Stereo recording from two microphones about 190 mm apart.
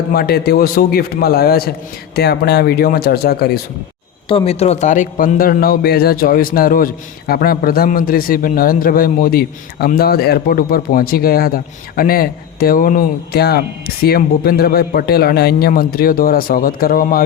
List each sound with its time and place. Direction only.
0.1 s a man's voice: 55° left (ahead or behind)
4.3 s a man's voice: 30° left (ahead or behind); by 17.2 s 50° left (ahead or behind)